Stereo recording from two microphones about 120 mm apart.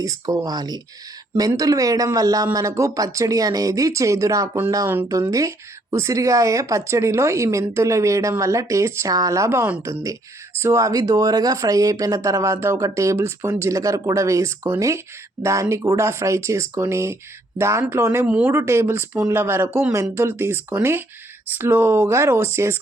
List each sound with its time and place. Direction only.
0.0 s speech: 30° right (ahead or behind)